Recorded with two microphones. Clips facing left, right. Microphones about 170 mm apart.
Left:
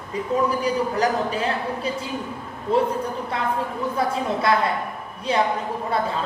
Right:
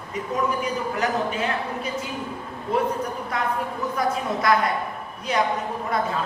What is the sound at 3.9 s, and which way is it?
A woman's voice, 30° left (ahead or behind).